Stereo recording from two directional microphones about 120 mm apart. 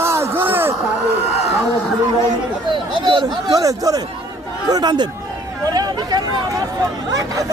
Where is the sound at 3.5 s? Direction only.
30° right (ahead or behind).